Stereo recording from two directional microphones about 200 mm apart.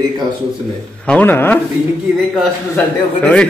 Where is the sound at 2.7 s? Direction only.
5° left (ahead or behind).